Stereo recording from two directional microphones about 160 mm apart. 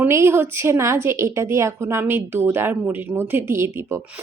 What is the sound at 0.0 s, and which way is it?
A woman's voice, 15° right (ahead or behind).